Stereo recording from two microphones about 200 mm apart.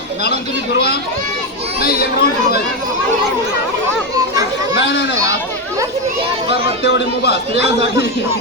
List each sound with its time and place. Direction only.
0.2 s a man's voice: 50° left (ahead or behind)
6.8 s a man's voice: 55° left (ahead or behind)